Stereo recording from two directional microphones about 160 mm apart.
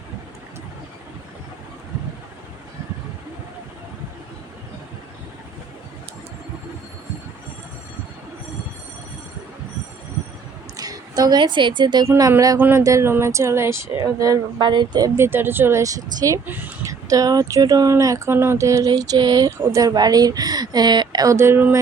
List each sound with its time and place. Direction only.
10.8 s speech: 25° right (ahead or behind)